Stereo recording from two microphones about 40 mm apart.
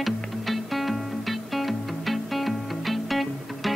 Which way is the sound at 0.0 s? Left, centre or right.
Centre.